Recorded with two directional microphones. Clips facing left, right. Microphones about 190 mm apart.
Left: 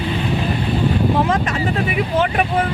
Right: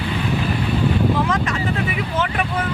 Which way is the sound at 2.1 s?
25° left (ahead or behind).